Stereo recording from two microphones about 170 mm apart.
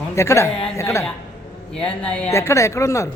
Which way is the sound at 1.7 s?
5° left (ahead or behind).